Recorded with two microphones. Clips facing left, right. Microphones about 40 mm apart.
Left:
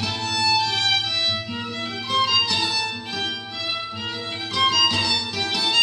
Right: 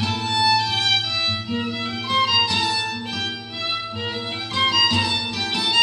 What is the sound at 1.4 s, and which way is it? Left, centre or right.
Violin, centre.